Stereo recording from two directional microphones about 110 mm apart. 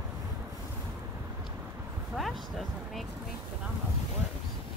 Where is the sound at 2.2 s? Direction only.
Centre (ahead or behind).